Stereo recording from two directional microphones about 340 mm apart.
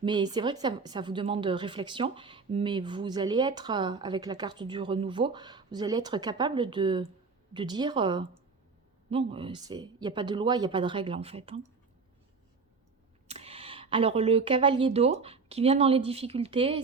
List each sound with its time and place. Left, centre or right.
0.0 s a woman's voice: centre
13.2 s speech: centre